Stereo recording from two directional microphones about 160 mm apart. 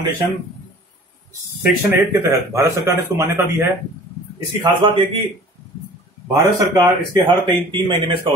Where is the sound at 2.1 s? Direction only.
15° right (ahead or behind).